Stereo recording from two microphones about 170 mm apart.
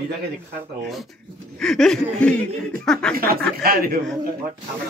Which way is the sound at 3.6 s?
60° right (ahead or behind).